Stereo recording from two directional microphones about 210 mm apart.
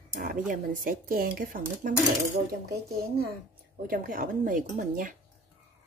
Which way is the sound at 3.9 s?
40° right (ahead or behind).